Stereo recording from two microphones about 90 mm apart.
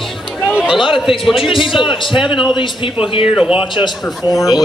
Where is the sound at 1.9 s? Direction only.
65° left (ahead or behind); by 3.3 s 85° left.